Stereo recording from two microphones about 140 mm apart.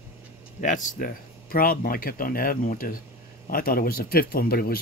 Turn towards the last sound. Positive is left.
turn(degrees=90)